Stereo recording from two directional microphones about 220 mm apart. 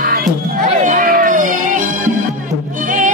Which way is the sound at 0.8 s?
40° right (ahead or behind).